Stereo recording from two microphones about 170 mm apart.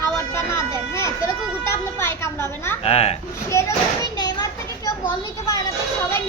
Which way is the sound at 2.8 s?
35° left (ahead or behind).